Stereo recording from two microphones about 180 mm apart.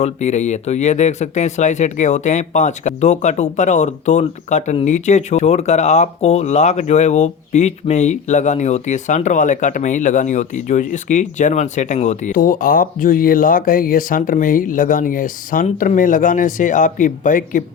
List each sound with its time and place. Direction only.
0.0 s speech: 40° left (ahead or behind)